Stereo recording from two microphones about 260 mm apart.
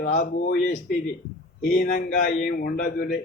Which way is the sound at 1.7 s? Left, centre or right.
Left.